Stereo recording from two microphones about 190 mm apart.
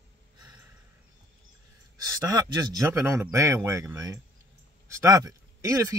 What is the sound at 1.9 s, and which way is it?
Speech, 20° right (ahead or behind).